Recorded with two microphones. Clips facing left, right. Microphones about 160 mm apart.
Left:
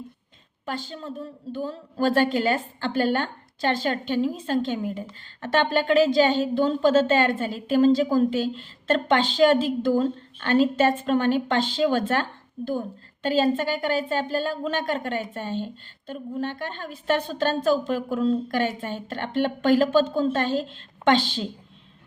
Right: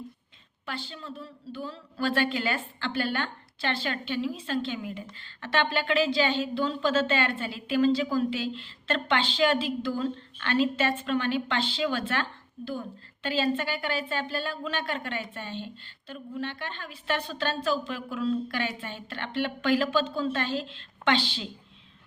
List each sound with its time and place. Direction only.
0.6 s a woman's voice: 45° left (ahead or behind)